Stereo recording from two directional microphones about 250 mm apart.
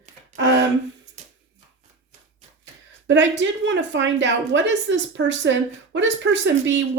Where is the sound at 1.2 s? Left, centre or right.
Right.